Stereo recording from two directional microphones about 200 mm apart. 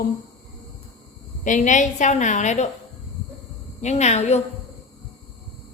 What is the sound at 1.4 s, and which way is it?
A woman's voice, 40° left (ahead or behind).